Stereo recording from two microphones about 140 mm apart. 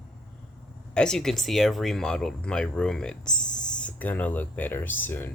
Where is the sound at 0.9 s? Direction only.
5° left (ahead or behind).